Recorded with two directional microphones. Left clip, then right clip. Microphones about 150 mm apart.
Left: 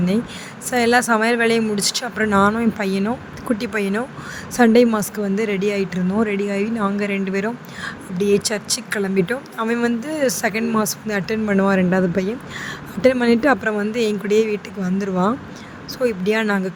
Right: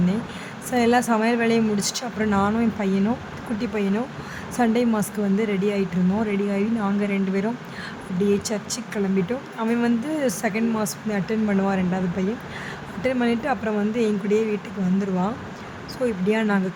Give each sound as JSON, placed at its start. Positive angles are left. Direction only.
{"t": 0.7, "sound": "speech", "side_deg": 40}